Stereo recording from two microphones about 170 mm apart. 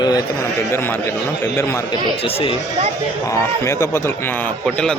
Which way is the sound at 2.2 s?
35° left (ahead or behind).